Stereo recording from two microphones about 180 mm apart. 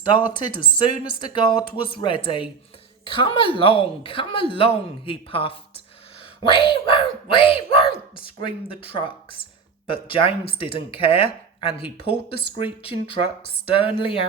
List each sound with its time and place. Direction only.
0.3 s a woman's voice: 25° left (ahead or behind)